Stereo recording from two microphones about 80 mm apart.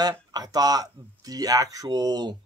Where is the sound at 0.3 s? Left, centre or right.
Right.